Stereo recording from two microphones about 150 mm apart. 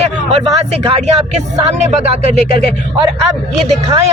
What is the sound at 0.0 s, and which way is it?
A man's voice, 45° right (ahead or behind).